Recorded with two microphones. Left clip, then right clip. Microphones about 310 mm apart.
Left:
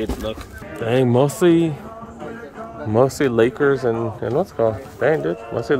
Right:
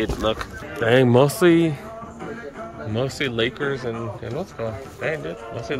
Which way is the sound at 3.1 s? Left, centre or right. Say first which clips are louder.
Left 6 dB; centre.